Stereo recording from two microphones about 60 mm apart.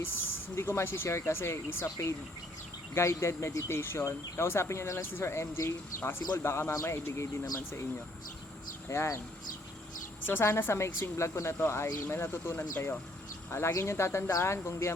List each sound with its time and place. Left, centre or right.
0.5 s speech: left
8.9 s speech: left
10.2 s speech: left